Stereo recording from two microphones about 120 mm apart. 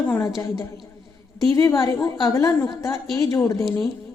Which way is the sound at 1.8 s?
30° left (ahead or behind).